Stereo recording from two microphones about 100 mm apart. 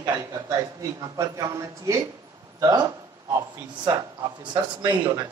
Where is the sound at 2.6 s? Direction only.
40° right (ahead or behind).